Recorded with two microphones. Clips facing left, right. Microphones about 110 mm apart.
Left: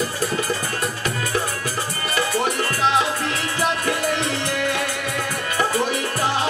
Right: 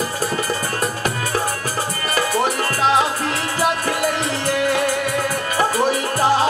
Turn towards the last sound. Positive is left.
turn(degrees=-35)  # may be behind; listen again after turning